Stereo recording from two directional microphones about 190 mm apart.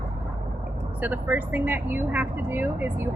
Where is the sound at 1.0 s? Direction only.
10° right (ahead or behind).